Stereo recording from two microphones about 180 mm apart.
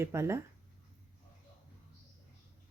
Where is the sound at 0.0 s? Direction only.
15° right (ahead or behind).